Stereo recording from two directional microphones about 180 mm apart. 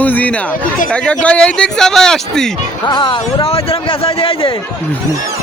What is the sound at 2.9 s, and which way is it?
Speech, 25° left (ahead or behind).